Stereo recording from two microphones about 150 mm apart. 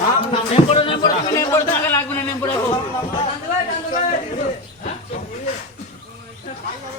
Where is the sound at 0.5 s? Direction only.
40° left (ahead or behind).